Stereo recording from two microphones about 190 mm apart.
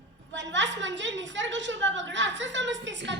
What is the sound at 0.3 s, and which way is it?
A woman's voice, 70° right (ahead or behind).